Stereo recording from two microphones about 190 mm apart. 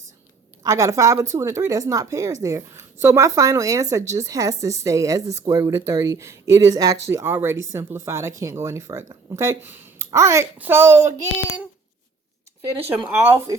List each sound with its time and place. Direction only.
0.6 s speech: 15° right (ahead or behind)
13.1 s speech: 10° right (ahead or behind)